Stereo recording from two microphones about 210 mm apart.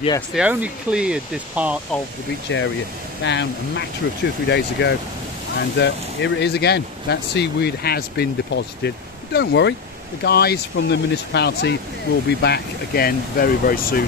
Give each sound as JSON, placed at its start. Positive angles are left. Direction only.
{"t": 0.3, "sound": "speech", "side_deg": -5}
{"t": 2.5, "sound": "speech", "side_deg": 60}